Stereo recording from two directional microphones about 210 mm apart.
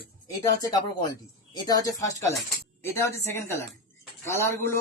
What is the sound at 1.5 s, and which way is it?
Speech, 15° left (ahead or behind).